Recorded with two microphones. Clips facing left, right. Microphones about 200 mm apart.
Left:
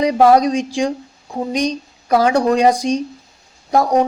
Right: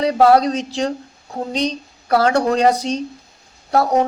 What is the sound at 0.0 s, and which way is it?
A woman's voice, 15° left (ahead or behind).